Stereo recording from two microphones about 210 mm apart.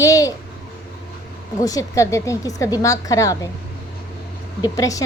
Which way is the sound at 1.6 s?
15° left (ahead or behind).